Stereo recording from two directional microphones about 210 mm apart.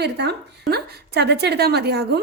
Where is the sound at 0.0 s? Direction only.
50° right (ahead or behind).